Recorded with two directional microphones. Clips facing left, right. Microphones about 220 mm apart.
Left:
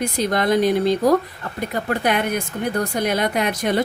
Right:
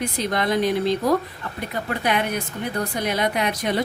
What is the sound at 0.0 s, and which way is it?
A woman's voice, 45° left (ahead or behind).